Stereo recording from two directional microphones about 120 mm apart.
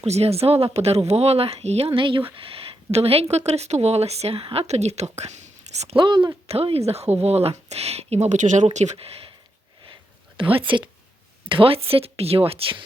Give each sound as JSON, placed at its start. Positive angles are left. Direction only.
{"t": 0.0, "sound": "speech", "side_deg": -60}
{"t": 6.0, "sound": "a woman's voice", "side_deg": -40}
{"t": 6.5, "sound": "speech", "side_deg": -55}
{"t": 9.8, "sound": "a sound", "side_deg": -45}
{"t": 10.5, "sound": "speech", "side_deg": -45}